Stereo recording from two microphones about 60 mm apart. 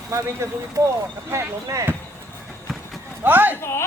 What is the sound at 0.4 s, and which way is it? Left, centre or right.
Speech, right.